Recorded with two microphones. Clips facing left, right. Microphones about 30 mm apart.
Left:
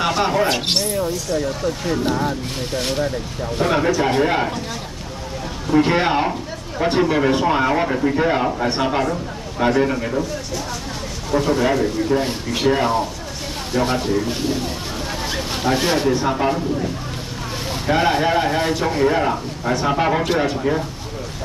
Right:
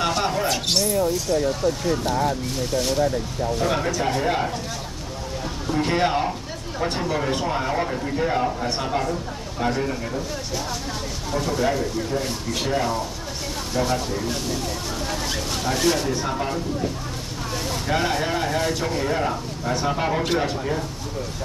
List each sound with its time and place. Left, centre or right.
0.0 s a sound: centre
0.7 s speech: left
1.3 s speech: centre
2.7 s speech: left
3.7 s speech: left
5.7 s speech: left
11.3 s speech: left
17.8 s speech: left